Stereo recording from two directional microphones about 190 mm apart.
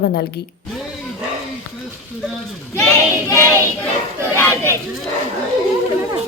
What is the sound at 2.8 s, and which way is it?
Child singing, 15° left (ahead or behind).